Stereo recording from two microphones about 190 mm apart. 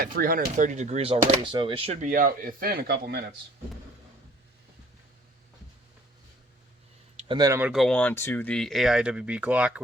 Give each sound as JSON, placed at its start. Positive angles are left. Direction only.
{"t": 0.0, "sound": "speech", "side_deg": -50}
{"t": 7.2, "sound": "speech", "side_deg": -25}
{"t": 7.7, "sound": "speech", "side_deg": 0}